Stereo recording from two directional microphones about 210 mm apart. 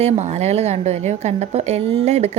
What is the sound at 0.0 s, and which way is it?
A woman's voice, 30° right (ahead or behind).